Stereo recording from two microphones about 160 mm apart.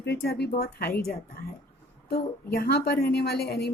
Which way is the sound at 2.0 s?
80° left.